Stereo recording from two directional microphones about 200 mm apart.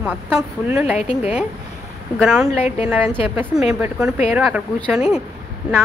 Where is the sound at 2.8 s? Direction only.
5° right (ahead or behind).